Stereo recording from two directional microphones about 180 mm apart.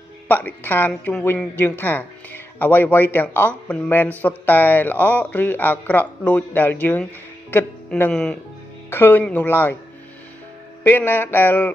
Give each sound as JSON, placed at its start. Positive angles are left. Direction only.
{"t": 0.3, "sound": "a woman's voice", "side_deg": 10}
{"t": 10.8, "sound": "a woman's voice", "side_deg": 10}